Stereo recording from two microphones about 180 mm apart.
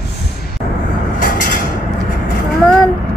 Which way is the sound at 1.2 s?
50° left (ahead or behind).